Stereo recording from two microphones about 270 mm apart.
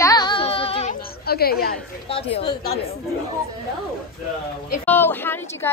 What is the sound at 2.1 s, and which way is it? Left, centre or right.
Speech, centre.